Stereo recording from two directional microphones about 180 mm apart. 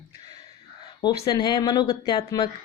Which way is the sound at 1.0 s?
20° left (ahead or behind).